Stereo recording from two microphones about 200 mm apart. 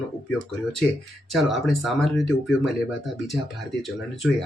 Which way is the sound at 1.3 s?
Centre (ahead or behind).